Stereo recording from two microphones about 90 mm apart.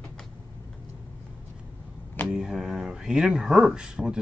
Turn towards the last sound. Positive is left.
turn(degrees=-10)  # may be behind; listen again after turning